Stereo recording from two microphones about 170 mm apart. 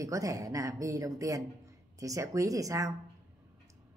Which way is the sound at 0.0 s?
20° right (ahead or behind).